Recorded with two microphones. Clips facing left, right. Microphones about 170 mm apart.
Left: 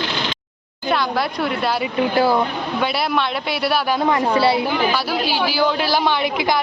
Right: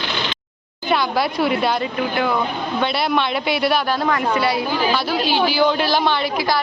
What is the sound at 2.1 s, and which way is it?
Speech, 35° left (ahead or behind).